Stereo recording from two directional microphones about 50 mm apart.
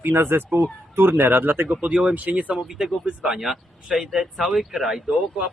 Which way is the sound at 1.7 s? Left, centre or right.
Right.